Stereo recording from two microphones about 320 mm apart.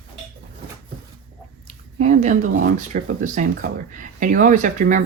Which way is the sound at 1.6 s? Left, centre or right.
Right.